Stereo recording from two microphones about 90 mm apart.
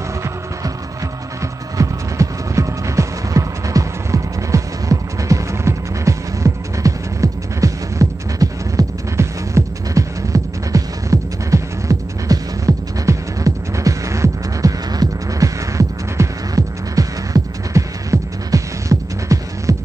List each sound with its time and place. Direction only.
1.8 s music: 35° right (ahead or behind)